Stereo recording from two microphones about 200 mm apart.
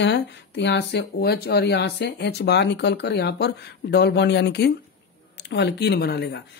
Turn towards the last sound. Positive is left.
turn(degrees=55)  # may be behind; listen again after turning